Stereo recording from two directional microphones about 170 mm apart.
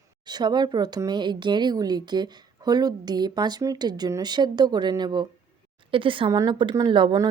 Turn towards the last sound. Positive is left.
turn(degrees=-30)  # may be behind; listen again after turning